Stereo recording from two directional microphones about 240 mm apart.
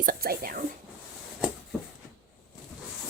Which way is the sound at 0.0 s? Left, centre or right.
Right.